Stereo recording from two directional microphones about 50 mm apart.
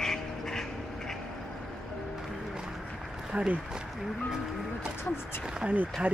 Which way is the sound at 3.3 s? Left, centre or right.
Right.